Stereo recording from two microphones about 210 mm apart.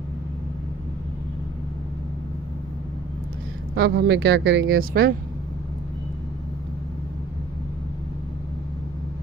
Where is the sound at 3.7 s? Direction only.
55° right (ahead or behind).